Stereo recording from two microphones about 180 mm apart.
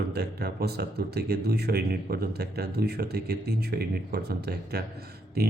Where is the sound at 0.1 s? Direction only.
65° right (ahead or behind).